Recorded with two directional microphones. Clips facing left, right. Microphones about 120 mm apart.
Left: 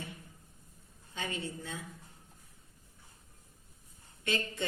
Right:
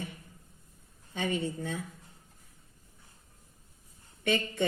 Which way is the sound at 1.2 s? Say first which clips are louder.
Right 7 dB; 60° right (ahead or behind).